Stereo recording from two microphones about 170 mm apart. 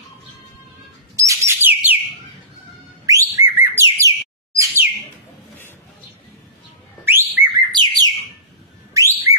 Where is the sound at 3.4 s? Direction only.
10° right (ahead or behind).